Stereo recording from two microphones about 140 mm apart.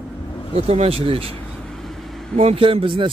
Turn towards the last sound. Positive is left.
turn(degrees=-40)  # may be behind; listen again after turning